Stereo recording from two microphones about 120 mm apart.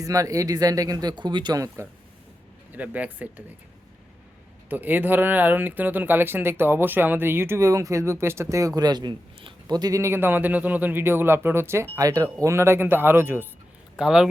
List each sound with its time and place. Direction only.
0.0 s speech: 30° right (ahead or behind)
1.6 s speech: 25° right (ahead or behind)
2.7 s speech: 15° right (ahead or behind)
4.7 s speech: 15° right (ahead or behind)
13.9 s speech: 5° right (ahead or behind)